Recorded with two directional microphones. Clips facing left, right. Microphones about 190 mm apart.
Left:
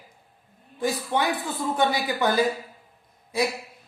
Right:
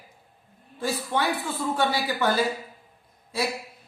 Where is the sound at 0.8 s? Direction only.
15° left (ahead or behind).